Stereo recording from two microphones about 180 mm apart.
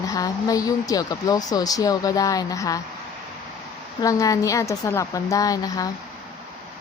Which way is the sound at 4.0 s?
20° left (ahead or behind).